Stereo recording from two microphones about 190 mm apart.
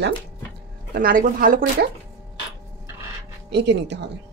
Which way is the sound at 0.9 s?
45° right (ahead or behind).